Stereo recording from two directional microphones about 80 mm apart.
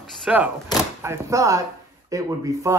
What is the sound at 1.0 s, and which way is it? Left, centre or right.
Speech, right.